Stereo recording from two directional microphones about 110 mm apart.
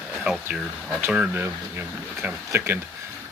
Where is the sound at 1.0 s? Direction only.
15° right (ahead or behind).